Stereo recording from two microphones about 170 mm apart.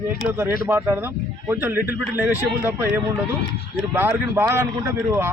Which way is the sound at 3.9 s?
15° right (ahead or behind).